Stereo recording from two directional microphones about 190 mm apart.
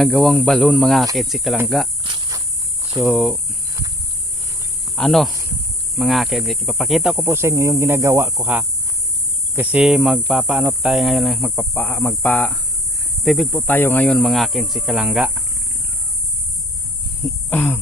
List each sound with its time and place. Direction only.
0.0 s speech: centre (ahead or behind)
2.0 s insect: 25° right (ahead or behind)
3.0 s speech: centre (ahead or behind)
4.9 s speech: centre (ahead or behind)
17.5 s speech: 10° left (ahead or behind)